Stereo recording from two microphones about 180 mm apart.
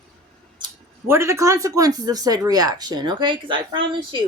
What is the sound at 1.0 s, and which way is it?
Speech, 15° right (ahead or behind).